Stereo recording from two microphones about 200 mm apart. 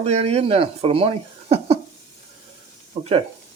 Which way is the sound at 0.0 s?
30° right (ahead or behind).